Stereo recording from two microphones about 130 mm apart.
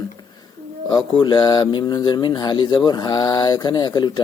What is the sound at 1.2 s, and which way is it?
Speech, 35° left (ahead or behind).